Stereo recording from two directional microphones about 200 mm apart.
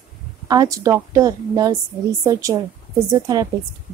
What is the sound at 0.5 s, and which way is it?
A woman's voice, 15° right (ahead or behind).